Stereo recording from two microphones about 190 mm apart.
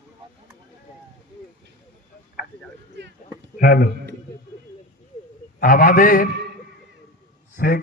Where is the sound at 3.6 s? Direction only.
50° left (ahead or behind).